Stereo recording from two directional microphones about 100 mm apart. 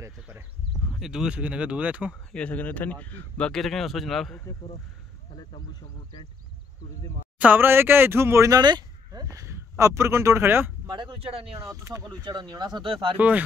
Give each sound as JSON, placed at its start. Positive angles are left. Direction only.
{"t": 0.0, "sound": "speech", "side_deg": -25}
{"t": 0.9, "sound": "speech", "side_deg": -5}
{"t": 2.3, "sound": "speech", "side_deg": 15}
{"t": 5.3, "sound": "speech", "side_deg": 45}
{"t": 7.3, "sound": "speech", "side_deg": -15}
{"t": 8.5, "sound": "speech", "side_deg": -45}
{"t": 10.9, "sound": "speech", "side_deg": -55}
{"t": 11.6, "sound": "speech", "side_deg": -35}
{"t": 12.9, "sound": "speech", "side_deg": -65}